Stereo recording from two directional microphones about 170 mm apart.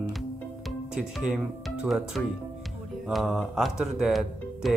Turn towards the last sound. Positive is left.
turn(degrees=0)  # may be behind; listen again after turning